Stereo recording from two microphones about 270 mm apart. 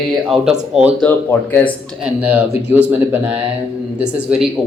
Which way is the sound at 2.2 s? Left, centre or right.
Centre.